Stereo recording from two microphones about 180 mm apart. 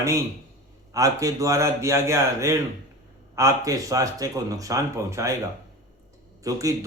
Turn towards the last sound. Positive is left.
turn(degrees=-20)  # may be behind; listen again after turning